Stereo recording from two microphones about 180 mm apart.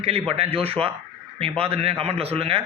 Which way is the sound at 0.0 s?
35° right (ahead or behind).